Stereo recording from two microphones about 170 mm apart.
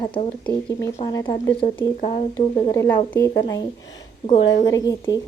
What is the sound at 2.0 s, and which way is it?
Speech, 40° left (ahead or behind).